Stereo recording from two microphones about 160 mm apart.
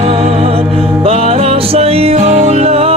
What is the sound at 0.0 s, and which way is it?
Music, 40° right (ahead or behind).